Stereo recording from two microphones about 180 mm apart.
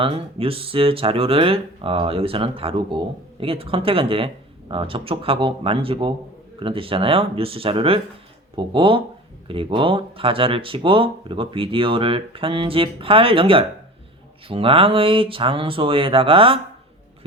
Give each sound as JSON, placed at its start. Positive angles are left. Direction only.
{"t": 0.0, "sound": "speech", "side_deg": -30}